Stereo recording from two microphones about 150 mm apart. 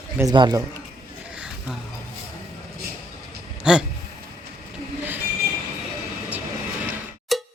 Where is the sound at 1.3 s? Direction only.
5° right (ahead or behind).